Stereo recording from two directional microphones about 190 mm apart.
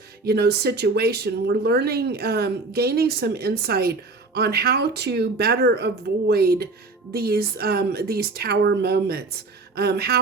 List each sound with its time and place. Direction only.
0.3 s speech: 60° right (ahead or behind)